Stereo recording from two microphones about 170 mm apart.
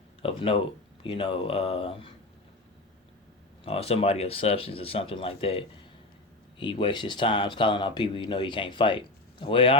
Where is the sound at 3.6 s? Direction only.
35° left (ahead or behind).